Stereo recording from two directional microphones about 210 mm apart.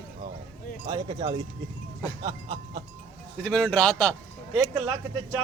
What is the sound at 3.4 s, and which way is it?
Speech, 5° left (ahead or behind).